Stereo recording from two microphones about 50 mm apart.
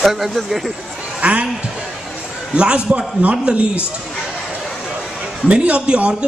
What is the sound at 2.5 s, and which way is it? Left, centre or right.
Speech, right.